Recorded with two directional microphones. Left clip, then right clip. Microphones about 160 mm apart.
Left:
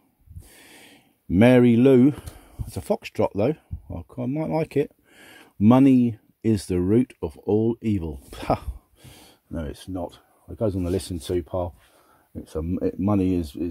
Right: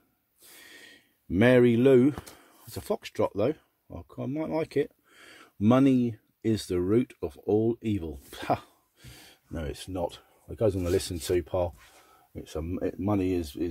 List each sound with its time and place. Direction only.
0.6 s a sound: 45° left (ahead or behind)
2.3 s speech: 50° left (ahead or behind); by 11.7 s 25° left (ahead or behind)
12.4 s speech: 50° left (ahead or behind)